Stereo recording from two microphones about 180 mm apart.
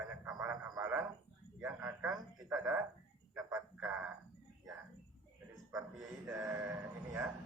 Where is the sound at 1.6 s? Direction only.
15° right (ahead or behind).